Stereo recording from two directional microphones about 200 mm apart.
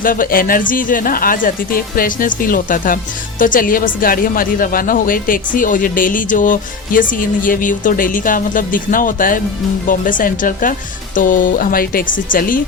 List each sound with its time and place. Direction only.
0.0 s speech: 45° left (ahead or behind)